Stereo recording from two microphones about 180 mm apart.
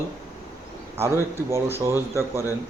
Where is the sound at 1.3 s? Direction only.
15° right (ahead or behind).